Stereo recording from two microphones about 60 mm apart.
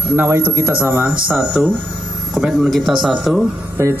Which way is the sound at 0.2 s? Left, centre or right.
Right.